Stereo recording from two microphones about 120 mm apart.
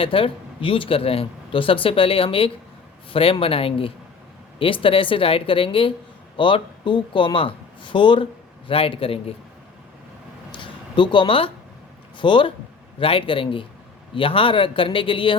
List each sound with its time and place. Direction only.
0.0 s speech: 50° left (ahead or behind)
10.5 s a sound: 40° left (ahead or behind)
12.1 s speech: 45° left (ahead or behind)